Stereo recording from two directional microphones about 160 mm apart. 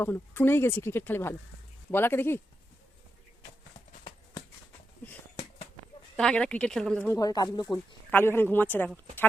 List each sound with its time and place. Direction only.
0.0 s speech: 15° left (ahead or behind)
6.1 s speech: 5° left (ahead or behind)
7.1 s speech: 20° left (ahead or behind)
8.1 s speech: 15° left (ahead or behind)